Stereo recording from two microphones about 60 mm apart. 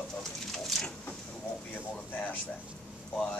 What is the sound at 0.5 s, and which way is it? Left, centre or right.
Bird, centre.